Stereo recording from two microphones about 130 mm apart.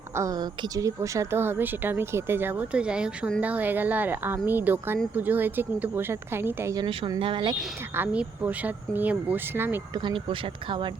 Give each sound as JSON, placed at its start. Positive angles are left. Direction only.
{"t": 0.2, "sound": "a woman's voice", "side_deg": -30}
{"t": 6.7, "sound": "speech", "side_deg": -40}
{"t": 7.9, "sound": "a woman's voice", "side_deg": -10}
{"t": 9.9, "sound": "speech", "side_deg": -40}